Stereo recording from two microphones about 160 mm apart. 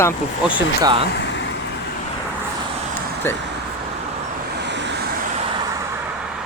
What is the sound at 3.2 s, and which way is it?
Speech, 15° left (ahead or behind).